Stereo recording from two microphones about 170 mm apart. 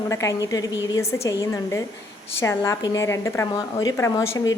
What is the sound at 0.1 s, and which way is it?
A woman's voice, 20° left (ahead or behind).